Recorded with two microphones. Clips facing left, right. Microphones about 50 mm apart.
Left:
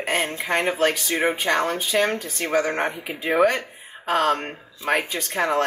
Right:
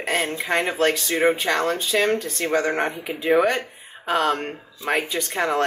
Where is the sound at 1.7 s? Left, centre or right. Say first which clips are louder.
Right 1 dB; left.